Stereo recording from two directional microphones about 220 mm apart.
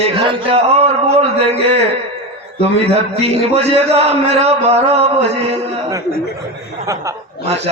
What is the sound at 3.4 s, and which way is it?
A man's voice, 25° right (ahead or behind).